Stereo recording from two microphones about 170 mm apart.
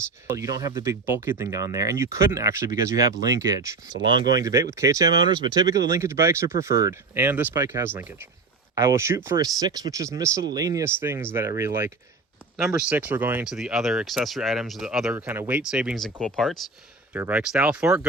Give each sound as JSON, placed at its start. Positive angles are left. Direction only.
{"t": 0.3, "sound": "speech", "side_deg": -20}
{"t": 17.2, "sound": "speech", "side_deg": -10}